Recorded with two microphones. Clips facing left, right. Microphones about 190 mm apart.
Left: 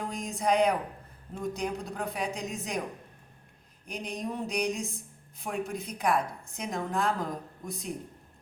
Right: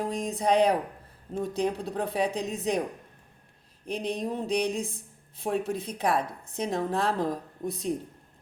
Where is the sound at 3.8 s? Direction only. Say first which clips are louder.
Right 5 dB; 25° right (ahead or behind).